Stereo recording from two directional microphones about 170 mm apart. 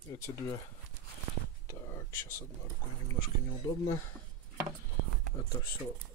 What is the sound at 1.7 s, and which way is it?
Whispering, 15° left (ahead or behind).